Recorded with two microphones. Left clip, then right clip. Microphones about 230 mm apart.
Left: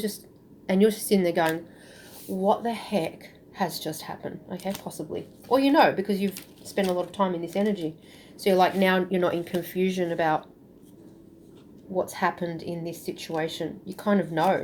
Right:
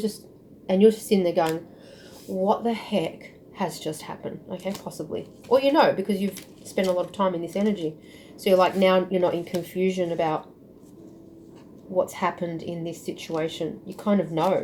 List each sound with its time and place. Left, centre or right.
0.7 s speech: left
11.9 s speech: left